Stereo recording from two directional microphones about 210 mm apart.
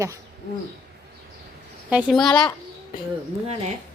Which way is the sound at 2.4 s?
20° left (ahead or behind).